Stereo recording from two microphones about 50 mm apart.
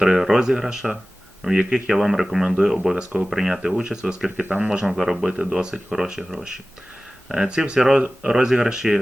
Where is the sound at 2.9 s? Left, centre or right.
Right.